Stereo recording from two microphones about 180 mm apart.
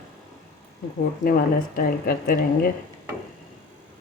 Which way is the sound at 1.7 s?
50° left (ahead or behind).